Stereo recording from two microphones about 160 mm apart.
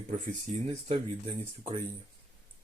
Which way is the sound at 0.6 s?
40° right (ahead or behind).